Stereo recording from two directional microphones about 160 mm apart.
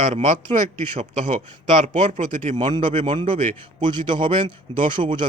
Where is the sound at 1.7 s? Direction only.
40° right (ahead or behind).